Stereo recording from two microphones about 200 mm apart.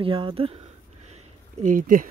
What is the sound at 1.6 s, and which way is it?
Speech, 40° right (ahead or behind).